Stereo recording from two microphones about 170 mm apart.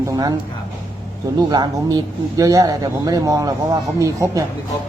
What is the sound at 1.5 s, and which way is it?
Speech, 25° right (ahead or behind).